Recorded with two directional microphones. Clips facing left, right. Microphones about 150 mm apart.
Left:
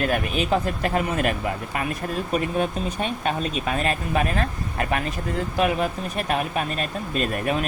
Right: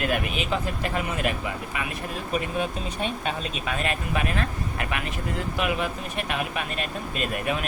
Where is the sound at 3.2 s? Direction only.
45° left (ahead or behind).